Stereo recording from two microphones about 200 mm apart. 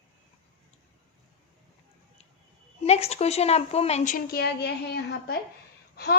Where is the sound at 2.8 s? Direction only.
30° left (ahead or behind).